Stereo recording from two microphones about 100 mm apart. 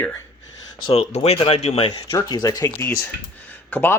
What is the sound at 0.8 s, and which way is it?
Speech, 80° left.